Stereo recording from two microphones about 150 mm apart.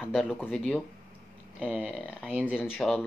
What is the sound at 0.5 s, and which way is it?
Speech, 5° left (ahead or behind).